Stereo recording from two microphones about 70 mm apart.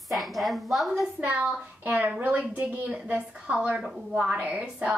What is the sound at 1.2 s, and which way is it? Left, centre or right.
A woman's voice, centre.